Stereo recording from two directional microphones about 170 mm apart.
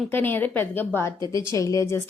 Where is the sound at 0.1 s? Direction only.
10° left (ahead or behind).